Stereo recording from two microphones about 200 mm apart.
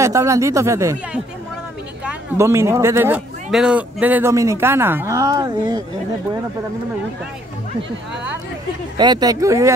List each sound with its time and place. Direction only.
0.0 s speech: 15° right (ahead or behind)
8.9 s speech: 20° right (ahead or behind)